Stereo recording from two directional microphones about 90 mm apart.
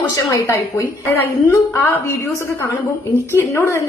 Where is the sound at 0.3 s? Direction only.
35° left (ahead or behind).